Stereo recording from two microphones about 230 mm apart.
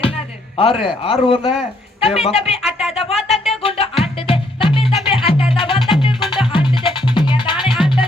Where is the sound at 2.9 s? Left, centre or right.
Left.